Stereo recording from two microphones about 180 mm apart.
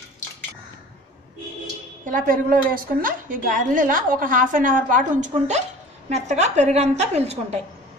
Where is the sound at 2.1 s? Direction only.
50° right (ahead or behind).